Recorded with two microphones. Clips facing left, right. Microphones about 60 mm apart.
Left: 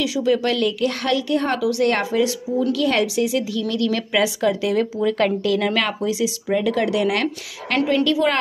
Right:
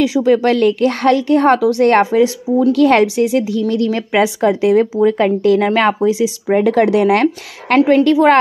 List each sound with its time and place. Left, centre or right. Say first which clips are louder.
0.0 s a woman's voice: right 7 dB; right
6.6 s a woman's voice: right 9 dB; right